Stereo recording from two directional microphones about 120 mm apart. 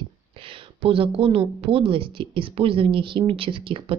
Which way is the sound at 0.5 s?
50° right (ahead or behind).